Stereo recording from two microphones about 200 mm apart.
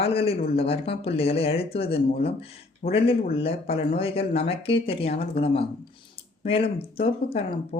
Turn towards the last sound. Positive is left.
turn(degrees=30)  # may be behind; listen again after turning